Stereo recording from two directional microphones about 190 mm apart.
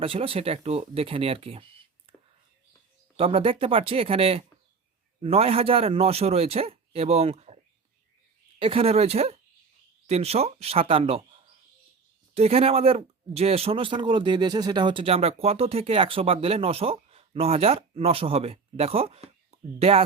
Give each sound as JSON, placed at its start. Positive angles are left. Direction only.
{"t": 0.0, "sound": "speech", "side_deg": -30}
{"t": 2.1, "sound": "whispering", "side_deg": -30}
{"t": 3.2, "sound": "speech", "side_deg": -30}
{"t": 12.3, "sound": "speech", "side_deg": -35}